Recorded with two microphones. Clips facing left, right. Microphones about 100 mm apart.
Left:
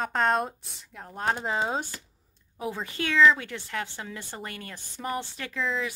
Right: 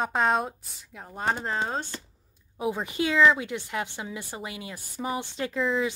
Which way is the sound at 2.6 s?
15° right (ahead or behind).